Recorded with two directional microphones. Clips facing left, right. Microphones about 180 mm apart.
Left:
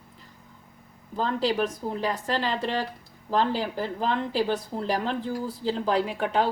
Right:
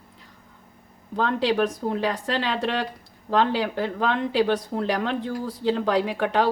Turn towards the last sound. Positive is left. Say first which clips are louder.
# right 3 dB
turn(degrees=-80)